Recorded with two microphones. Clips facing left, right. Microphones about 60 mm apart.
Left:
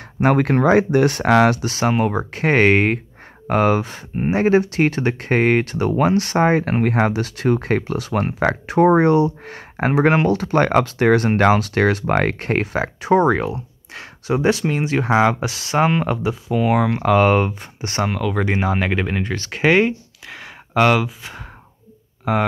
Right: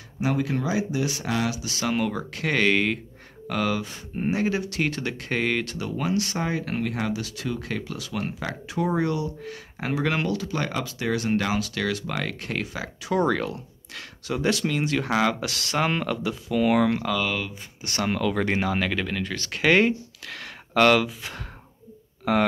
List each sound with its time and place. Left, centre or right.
0.2 s speech: left
13.2 s speech: left
17.0 s speech: left
18.0 s speech: centre
19.8 s speech: centre